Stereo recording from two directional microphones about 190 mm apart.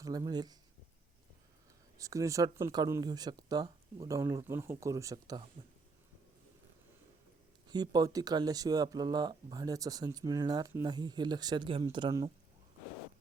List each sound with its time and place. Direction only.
0.0 s speech: 20° right (ahead or behind)
2.0 s speech: 15° right (ahead or behind)
7.7 s speech: 20° right (ahead or behind)